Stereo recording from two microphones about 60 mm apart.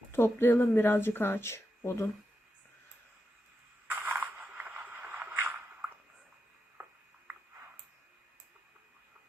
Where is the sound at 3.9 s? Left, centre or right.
Right.